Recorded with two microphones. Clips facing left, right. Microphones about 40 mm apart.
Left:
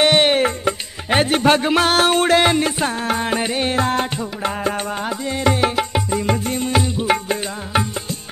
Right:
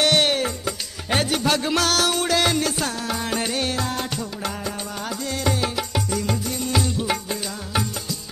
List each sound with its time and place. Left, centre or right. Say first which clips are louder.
0.0 s music: left 5 dB; left
5.2 s music: left 6 dB; left